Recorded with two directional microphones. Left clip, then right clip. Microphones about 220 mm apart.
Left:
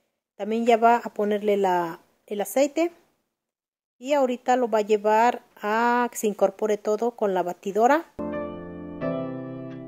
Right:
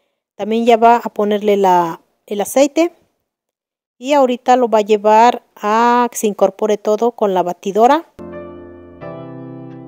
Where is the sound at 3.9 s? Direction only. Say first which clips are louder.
Right 10 dB; 40° right (ahead or behind).